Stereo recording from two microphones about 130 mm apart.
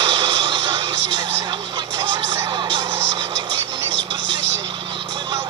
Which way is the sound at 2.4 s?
40° right (ahead or behind).